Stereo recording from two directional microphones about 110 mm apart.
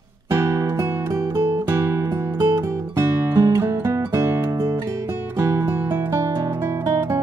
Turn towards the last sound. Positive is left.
turn(degrees=-25)  # may be behind; listen again after turning